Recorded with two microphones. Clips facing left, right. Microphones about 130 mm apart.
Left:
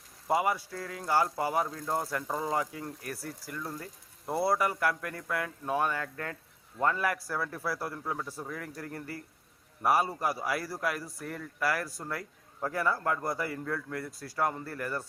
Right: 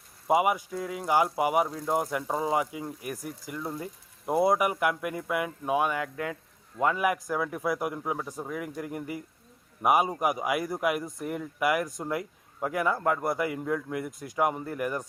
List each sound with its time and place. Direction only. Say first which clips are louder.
0.3 s speech: right 4 dB; 15° right (ahead or behind)